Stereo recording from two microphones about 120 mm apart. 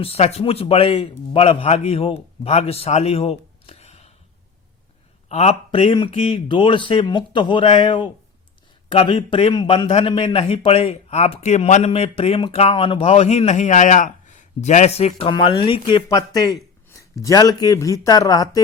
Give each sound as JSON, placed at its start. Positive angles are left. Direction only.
{"t": 0.0, "sound": "a man's voice", "side_deg": 60}
{"t": 5.3, "sound": "a man's voice", "side_deg": 65}
{"t": 15.3, "sound": "speech", "side_deg": 45}
{"t": 16.0, "sound": "speech", "side_deg": 35}